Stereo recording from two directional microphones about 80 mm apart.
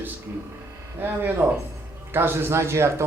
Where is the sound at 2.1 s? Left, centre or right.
Right.